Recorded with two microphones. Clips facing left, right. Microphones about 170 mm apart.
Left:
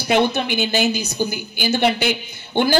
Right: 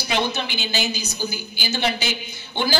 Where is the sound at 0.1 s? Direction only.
55° left (ahead or behind).